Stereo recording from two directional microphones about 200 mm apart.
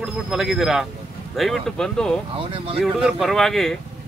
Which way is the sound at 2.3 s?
25° right (ahead or behind).